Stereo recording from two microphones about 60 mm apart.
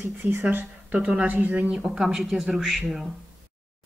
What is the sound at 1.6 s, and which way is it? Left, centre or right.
Speech, centre.